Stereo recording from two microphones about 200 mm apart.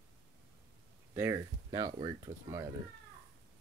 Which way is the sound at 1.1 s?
15° right (ahead or behind).